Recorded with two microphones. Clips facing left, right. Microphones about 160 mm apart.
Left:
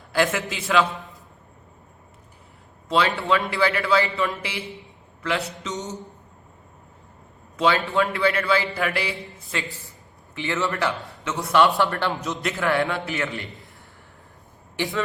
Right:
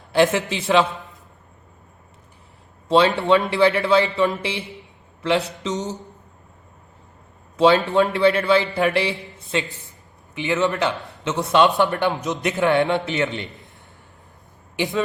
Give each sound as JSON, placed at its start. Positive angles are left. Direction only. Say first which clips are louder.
{"t": 0.1, "sound": "a man's voice", "louder": "right 5 dB", "side_deg": -25}
{"t": 2.9, "sound": "a man's voice", "louder": "right 5 dB", "side_deg": -30}
{"t": 7.5, "sound": "a man's voice", "louder": "right 6 dB", "side_deg": -30}
{"t": 14.8, "sound": "a man's voice", "louder": "right 3 dB", "side_deg": -20}